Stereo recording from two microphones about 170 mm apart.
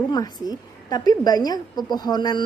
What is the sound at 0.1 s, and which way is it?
A woman's voice, 20° left (ahead or behind).